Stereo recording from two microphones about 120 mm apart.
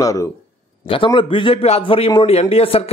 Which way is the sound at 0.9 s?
45° left (ahead or behind).